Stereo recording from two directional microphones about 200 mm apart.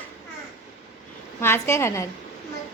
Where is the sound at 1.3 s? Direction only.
10° left (ahead or behind).